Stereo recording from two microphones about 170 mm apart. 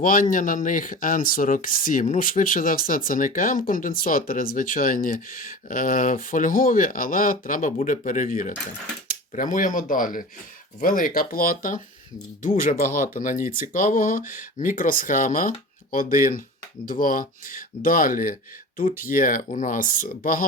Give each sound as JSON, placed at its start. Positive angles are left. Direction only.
{"t": 0.0, "sound": "speech", "side_deg": 55}